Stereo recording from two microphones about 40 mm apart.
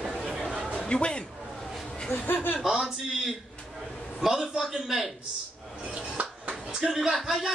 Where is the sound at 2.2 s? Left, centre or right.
Left.